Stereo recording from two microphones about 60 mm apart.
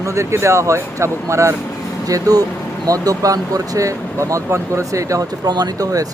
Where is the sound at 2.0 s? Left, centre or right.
Right.